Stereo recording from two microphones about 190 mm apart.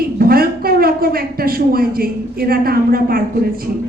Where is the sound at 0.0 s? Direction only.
50° right (ahead or behind).